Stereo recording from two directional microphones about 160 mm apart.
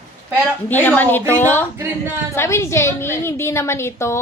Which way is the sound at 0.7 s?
10° left (ahead or behind).